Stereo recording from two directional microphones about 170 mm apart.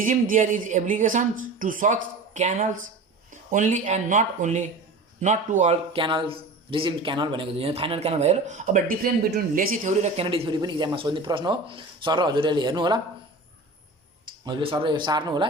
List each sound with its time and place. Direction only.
0.0 s a man's voice: 50° right (ahead or behind); by 13.0 s 25° right (ahead or behind)
14.4 s a man's voice: 30° right (ahead or behind)